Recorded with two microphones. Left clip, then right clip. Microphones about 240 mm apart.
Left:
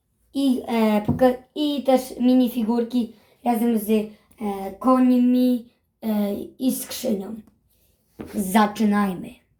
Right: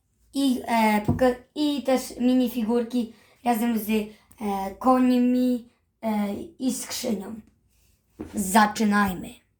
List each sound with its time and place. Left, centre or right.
0.3 s a woman's voice: right
8.4 s a woman's voice: right